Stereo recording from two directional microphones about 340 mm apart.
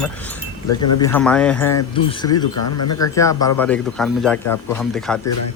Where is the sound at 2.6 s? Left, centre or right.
Left.